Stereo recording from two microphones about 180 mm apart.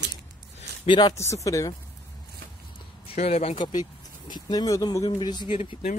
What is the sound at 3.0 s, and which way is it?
A man's voice, 35° left (ahead or behind).